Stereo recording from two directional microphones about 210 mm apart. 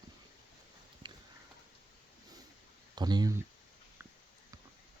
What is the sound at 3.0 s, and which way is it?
Speech, 20° right (ahead or behind).